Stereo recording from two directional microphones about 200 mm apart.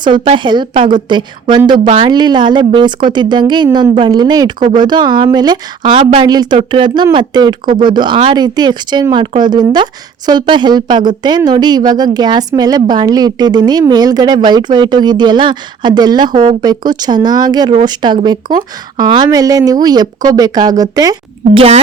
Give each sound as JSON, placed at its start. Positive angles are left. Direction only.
{"t": 0.0, "sound": "speech", "side_deg": -25}
{"t": 5.8, "sound": "speech", "side_deg": -30}